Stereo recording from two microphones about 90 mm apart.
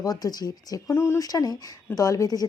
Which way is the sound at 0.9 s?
30° left (ahead or behind).